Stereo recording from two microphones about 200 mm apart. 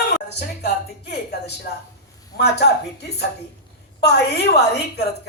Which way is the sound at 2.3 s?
55° left (ahead or behind).